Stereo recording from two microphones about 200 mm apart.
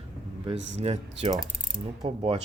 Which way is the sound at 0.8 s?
30° right (ahead or behind).